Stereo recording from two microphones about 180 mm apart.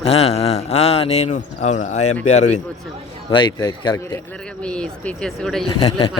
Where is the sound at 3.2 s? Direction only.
25° left (ahead or behind).